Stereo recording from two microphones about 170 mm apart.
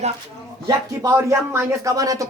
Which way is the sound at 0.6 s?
20° right (ahead or behind).